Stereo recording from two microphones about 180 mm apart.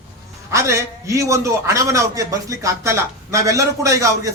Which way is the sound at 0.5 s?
15° right (ahead or behind).